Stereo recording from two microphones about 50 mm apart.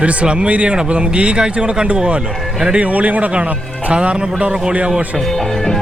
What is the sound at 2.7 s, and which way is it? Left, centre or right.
A man's voice, right.